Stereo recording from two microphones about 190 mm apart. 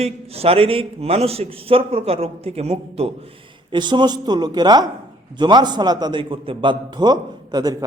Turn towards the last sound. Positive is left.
turn(degrees=-20)  # may be behind; listen again after turning